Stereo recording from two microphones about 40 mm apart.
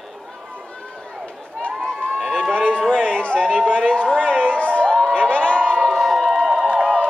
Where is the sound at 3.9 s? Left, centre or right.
Left.